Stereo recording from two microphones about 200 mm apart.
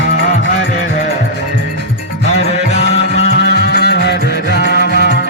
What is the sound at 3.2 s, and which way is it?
Music, 65° left (ahead or behind).